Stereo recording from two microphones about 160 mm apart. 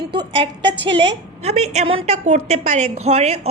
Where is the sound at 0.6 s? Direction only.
90° right.